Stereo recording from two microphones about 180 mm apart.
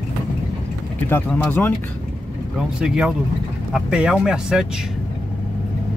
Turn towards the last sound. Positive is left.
turn(degrees=-5)  # may be behind; listen again after turning